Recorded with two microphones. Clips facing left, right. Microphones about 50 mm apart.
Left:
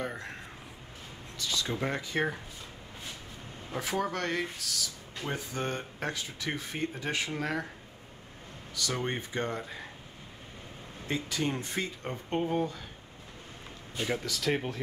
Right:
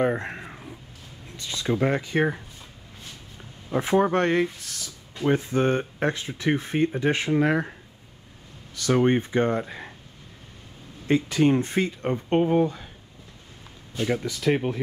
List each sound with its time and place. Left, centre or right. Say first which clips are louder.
0.0 s a sound: right 12 dB; right
1.3 s speech: right 6 dB; right
3.7 s speech: right 11 dB; right
8.8 s speech: right 13 dB; right
9.7 s a sound: right 4 dB; centre
11.1 s speech: right 11 dB; right
13.9 s speech: right 6 dB; centre
14.2 s speech: right 7 dB; centre